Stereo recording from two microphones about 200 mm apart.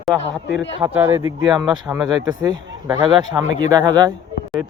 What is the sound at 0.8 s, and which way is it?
Speech, 10° right (ahead or behind).